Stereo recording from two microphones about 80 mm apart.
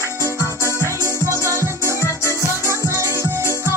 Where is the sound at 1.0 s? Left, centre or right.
Left.